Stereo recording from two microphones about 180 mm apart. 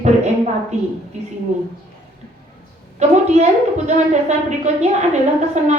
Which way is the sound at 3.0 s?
40° right (ahead or behind).